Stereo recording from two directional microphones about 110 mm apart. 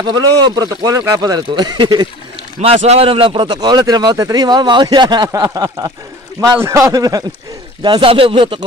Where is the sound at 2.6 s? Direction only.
70° right (ahead or behind); by 5.3 s 40° right (ahead or behind).